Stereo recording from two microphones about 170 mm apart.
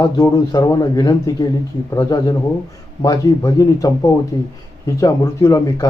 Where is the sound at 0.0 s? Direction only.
20° left (ahead or behind).